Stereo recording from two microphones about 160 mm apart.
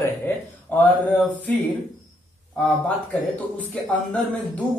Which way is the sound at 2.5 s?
10° left (ahead or behind).